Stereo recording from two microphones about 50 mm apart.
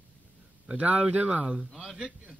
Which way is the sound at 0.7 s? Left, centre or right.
Right.